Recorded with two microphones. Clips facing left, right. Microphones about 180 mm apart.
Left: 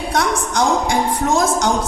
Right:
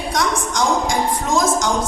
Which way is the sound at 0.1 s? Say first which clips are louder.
Left 2 dB; 60° left (ahead or behind).